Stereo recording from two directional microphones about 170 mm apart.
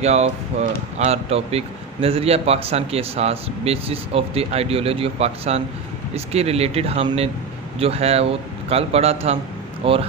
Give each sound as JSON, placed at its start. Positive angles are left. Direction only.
{"t": 0.0, "sound": "a man's voice", "side_deg": -40}